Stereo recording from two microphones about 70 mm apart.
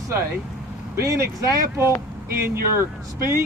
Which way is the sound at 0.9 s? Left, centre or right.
Right.